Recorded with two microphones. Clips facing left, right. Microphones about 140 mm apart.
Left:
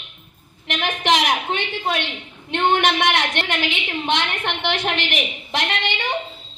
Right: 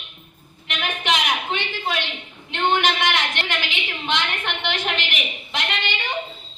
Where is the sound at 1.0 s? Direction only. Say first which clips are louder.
Left 5 dB; 75° left (ahead or behind).